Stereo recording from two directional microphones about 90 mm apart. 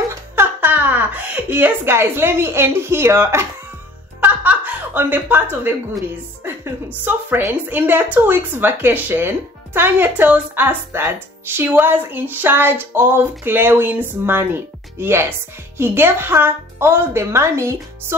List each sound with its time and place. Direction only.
0.1 s a sound: 25° right (ahead or behind)
4.2 s music: 20° right (ahead or behind)
7.1 s speech: 20° right (ahead or behind)